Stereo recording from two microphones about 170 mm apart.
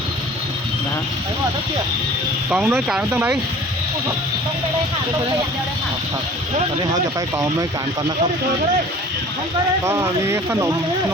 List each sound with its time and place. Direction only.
2.5 s speech: 5° right (ahead or behind)
6.9 s speech: 20° right (ahead or behind)
9.8 s speech: 15° right (ahead or behind)